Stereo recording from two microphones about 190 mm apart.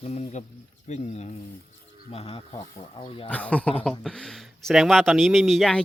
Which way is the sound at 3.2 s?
10° left (ahead or behind).